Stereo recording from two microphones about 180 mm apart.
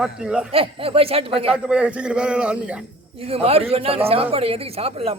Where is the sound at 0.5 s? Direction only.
30° right (ahead or behind).